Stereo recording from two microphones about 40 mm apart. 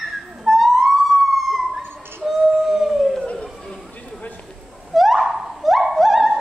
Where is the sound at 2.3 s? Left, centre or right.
Centre.